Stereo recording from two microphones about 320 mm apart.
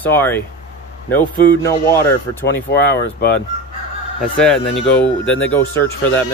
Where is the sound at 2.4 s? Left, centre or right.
Left.